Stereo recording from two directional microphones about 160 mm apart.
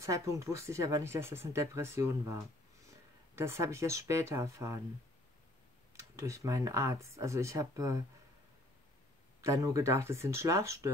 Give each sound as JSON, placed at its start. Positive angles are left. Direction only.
{"t": 0.0, "sound": "speech", "side_deg": -20}
{"t": 3.3, "sound": "speech", "side_deg": -15}
{"t": 6.1, "sound": "speech", "side_deg": -20}
{"t": 9.4, "sound": "speech", "side_deg": -20}